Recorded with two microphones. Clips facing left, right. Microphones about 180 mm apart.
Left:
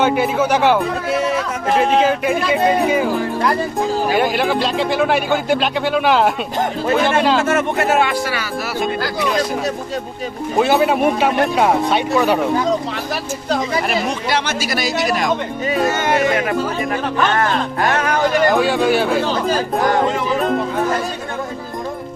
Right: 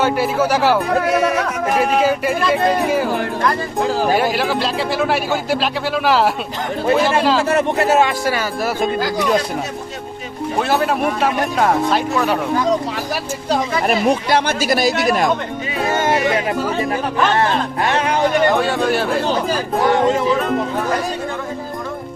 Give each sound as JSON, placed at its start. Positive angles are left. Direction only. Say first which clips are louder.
{"t": 0.0, "sound": "speech", "louder": "left 1 dB", "side_deg": -5}
{"t": 2.0, "sound": "speech", "louder": "left 1 dB", "side_deg": -5}
{"t": 4.2, "sound": "speech", "louder": "left 1 dB", "side_deg": 0}
{"t": 7.4, "sound": "speech", "louder": "right 1 dB", "side_deg": -35}
{"t": 10.6, "sound": "speech", "louder": "left 4 dB", "side_deg": 0}
{"t": 13.5, "sound": "speech", "louder": "right 1 dB", "side_deg": -45}
{"t": 17.3, "sound": "speech", "louder": "right 1 dB", "side_deg": -30}
{"t": 18.5, "sound": "speech", "louder": "left 2 dB", "side_deg": 0}